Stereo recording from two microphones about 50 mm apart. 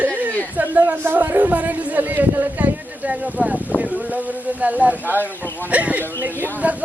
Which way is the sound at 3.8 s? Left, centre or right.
Right.